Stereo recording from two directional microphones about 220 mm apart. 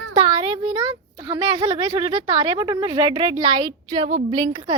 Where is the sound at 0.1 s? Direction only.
20° right (ahead or behind).